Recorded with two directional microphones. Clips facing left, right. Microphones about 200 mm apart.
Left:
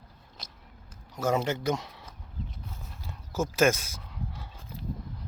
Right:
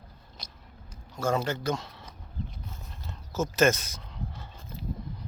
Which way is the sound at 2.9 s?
10° left (ahead or behind).